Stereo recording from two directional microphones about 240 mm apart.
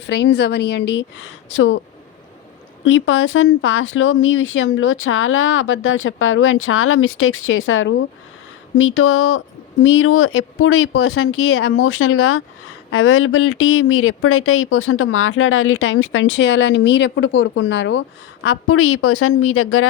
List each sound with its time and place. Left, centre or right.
0.0 s a woman's voice: left
2.8 s speech: left